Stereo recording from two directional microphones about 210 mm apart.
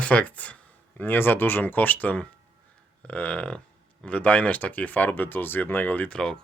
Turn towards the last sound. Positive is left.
turn(degrees=5)  # may be behind; listen again after turning